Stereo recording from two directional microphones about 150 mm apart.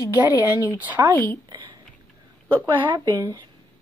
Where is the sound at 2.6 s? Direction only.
30° right (ahead or behind).